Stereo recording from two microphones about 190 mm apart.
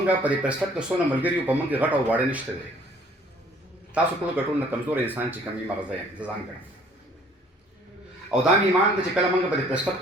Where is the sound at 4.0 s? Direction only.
5° right (ahead or behind).